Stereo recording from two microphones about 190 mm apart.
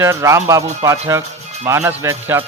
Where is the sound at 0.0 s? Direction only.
15° right (ahead or behind).